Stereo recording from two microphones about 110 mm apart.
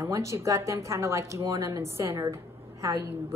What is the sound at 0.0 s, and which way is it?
Speech, 30° right (ahead or behind).